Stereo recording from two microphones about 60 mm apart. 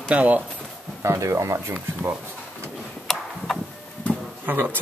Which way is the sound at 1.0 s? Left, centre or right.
Right.